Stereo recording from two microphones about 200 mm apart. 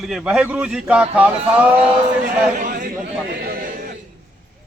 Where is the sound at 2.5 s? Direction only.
45° right (ahead or behind).